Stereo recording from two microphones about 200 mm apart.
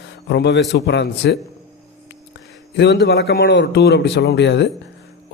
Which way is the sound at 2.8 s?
55° left (ahead or behind).